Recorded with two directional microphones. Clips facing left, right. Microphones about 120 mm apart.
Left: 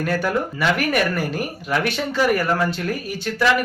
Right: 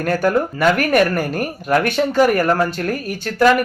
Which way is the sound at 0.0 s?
50° right (ahead or behind).